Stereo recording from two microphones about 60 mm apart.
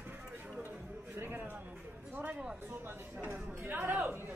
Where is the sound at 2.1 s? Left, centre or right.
Right.